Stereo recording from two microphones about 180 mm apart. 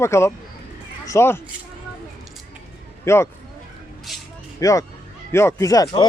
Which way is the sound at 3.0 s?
15° left (ahead or behind).